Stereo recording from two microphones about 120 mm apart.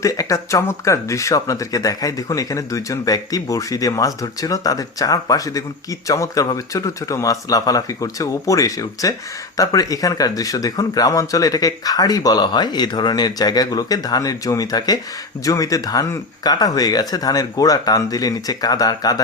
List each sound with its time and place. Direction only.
0.0 s speech: 25° left (ahead or behind)